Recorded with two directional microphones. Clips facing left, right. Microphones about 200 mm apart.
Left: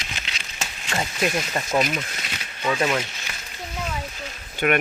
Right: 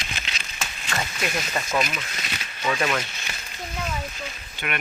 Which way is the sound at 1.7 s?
30° left (ahead or behind).